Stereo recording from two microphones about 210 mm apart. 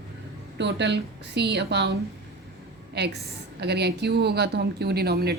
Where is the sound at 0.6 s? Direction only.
55° right (ahead or behind).